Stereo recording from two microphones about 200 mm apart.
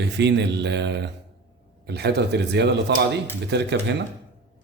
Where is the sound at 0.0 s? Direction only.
60° right (ahead or behind).